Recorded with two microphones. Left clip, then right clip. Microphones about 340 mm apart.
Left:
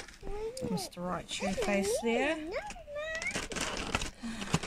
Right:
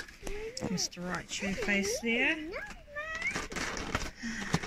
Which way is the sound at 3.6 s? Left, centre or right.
Centre.